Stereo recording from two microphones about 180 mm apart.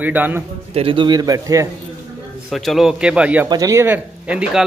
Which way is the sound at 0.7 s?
30° right (ahead or behind).